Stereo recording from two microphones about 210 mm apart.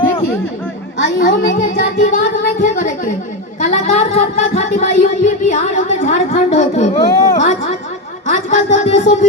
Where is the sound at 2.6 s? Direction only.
40° left (ahead or behind).